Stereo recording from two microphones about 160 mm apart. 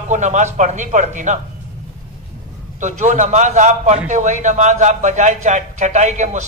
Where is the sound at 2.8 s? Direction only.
50° right (ahead or behind).